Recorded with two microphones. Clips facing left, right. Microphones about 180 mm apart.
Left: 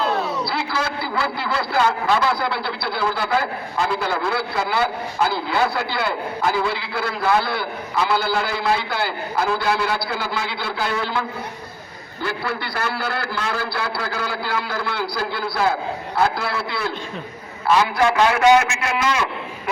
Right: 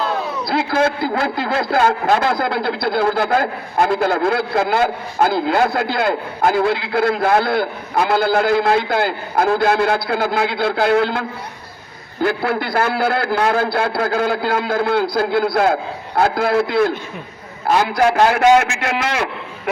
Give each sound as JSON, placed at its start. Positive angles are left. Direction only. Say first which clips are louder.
{"t": 0.4, "sound": "a man's voice", "louder": "right 7 dB", "side_deg": -50}
{"t": 18.9, "sound": "a man's voice", "louder": "right 1 dB", "side_deg": -65}